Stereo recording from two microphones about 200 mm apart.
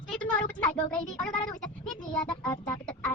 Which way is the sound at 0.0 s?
Centre (ahead or behind).